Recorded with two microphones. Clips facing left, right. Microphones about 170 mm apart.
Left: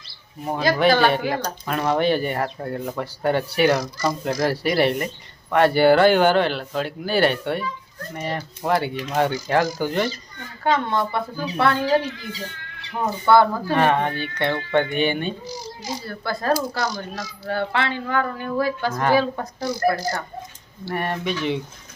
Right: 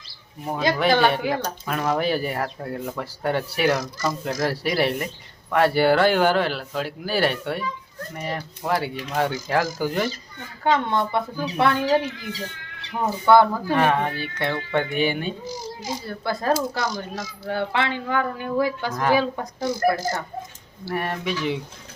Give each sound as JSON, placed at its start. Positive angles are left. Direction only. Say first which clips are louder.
{"t": 0.8, "sound": "speech", "louder": "left 2 dB", "side_deg": 0}
{"t": 10.6, "sound": "speech", "louder": "even", "side_deg": -20}
{"t": 13.2, "sound": "speech", "louder": "even", "side_deg": -15}
{"t": 13.7, "sound": "speech", "louder": "left 2 dB", "side_deg": -5}
{"t": 15.4, "sound": "speech", "louder": "right 1 dB", "side_deg": -50}
{"t": 16.0, "sound": "speech", "louder": "even", "side_deg": -20}
{"t": 20.8, "sound": "speech", "louder": "left 1 dB", "side_deg": 0}